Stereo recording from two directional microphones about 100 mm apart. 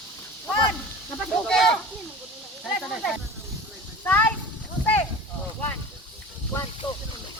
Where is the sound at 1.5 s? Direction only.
5° left (ahead or behind).